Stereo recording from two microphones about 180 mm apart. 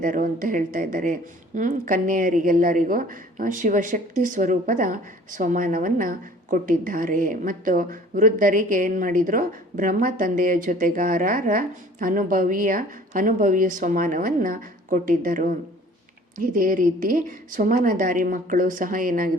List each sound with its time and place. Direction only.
0.0 s speech: 50° right (ahead or behind)